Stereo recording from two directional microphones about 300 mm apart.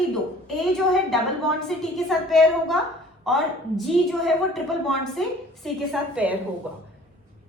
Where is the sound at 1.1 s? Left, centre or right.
Centre.